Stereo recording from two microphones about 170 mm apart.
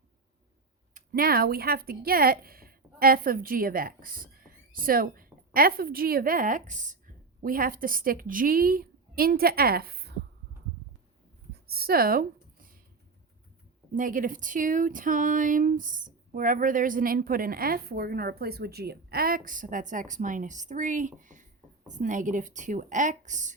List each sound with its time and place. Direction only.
0.9 s a woman's voice: 60° right (ahead or behind)
11.6 s speech: 65° right (ahead or behind)
13.9 s speech: 50° right (ahead or behind)